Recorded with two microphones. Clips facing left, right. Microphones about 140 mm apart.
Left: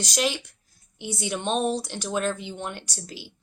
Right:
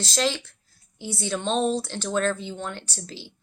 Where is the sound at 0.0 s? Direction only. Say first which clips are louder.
Right 1 dB; 15° left (ahead or behind).